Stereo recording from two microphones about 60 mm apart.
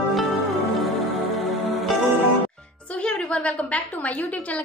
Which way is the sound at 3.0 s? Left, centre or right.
Centre.